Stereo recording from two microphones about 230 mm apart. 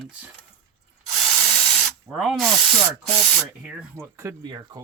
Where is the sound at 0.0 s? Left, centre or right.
Centre.